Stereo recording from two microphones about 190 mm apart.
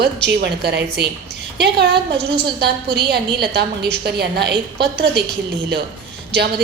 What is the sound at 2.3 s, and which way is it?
A woman's voice, 60° right (ahead or behind).